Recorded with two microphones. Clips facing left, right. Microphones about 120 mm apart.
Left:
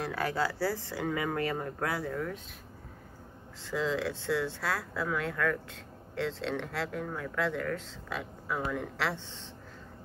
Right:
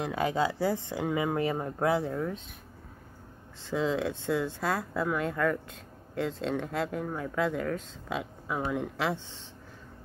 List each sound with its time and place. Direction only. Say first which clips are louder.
0.0 s speech: right 3 dB; 20° right (ahead or behind)
3.7 s speech: right 2 dB; 20° right (ahead or behind)